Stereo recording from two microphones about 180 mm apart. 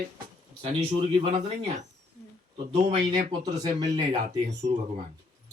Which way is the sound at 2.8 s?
25° right (ahead or behind).